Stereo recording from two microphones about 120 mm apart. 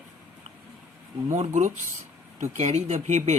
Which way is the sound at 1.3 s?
80° right.